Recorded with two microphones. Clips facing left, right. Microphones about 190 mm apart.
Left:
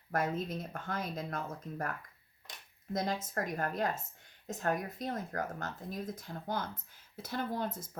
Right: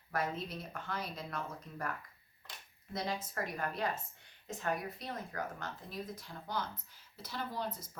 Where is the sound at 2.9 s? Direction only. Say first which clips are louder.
Left 4 dB; 45° left (ahead or behind).